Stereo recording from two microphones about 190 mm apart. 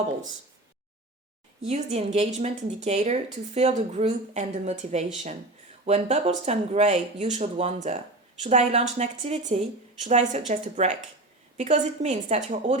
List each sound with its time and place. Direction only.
1.6 s speech: 35° right (ahead or behind)